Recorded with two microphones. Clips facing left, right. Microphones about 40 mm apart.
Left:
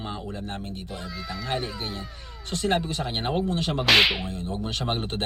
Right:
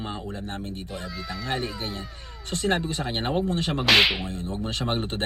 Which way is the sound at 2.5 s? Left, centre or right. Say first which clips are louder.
Even; right.